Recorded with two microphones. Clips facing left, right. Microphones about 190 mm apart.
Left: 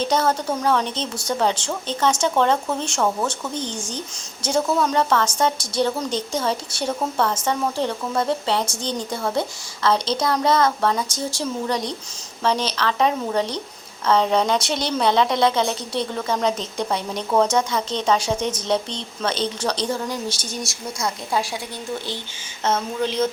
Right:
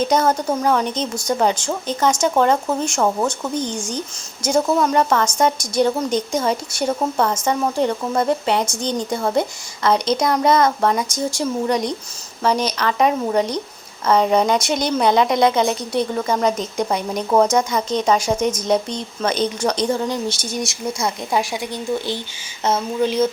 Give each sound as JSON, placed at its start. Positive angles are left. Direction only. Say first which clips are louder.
{"t": 0.0, "sound": "a woman's voice", "louder": "right 3 dB", "side_deg": -10}
{"t": 20.2, "sound": "speech", "louder": "right 4 dB", "side_deg": 10}
{"t": 20.5, "sound": "a woman's voice", "louder": "right 6 dB", "side_deg": -20}
{"t": 22.6, "sound": "a woman's voice", "louder": "right 3 dB", "side_deg": -10}